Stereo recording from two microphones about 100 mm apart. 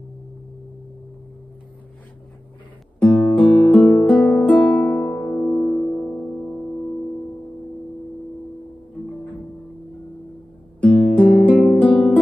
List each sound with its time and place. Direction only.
3.0 s music: 10° left (ahead or behind)
4.5 s music: 15° left (ahead or behind)
5.6 s music: 5° left (ahead or behind)
10.8 s guitar: 15° left (ahead or behind)